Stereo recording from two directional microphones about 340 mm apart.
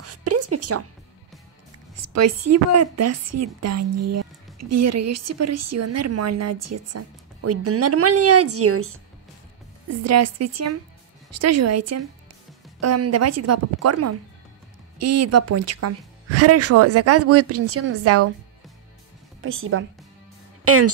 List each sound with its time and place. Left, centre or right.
0.0 s a sound: right
2.0 s speech: right
9.8 s speech: right
19.4 s speech: right